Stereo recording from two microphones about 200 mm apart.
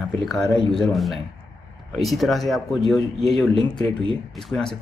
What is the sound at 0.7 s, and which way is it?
Speech, centre (ahead or behind).